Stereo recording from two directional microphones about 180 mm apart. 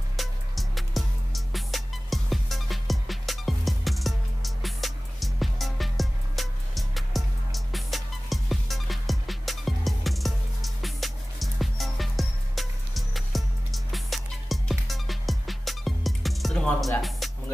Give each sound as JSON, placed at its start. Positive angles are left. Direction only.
{"t": 0.2, "sound": "music", "side_deg": 0}